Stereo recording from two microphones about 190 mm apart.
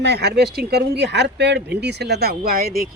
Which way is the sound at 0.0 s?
60° right (ahead or behind).